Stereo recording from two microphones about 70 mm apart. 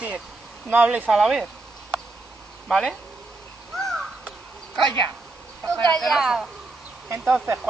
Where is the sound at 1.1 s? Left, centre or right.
Centre.